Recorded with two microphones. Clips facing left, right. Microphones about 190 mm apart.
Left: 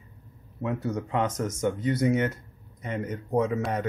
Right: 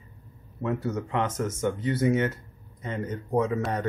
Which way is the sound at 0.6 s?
15° left (ahead or behind).